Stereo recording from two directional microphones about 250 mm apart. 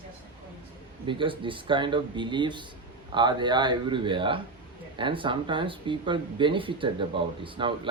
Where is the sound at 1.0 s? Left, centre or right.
Centre.